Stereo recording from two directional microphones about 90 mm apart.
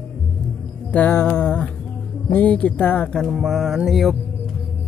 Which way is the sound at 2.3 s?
15° left (ahead or behind).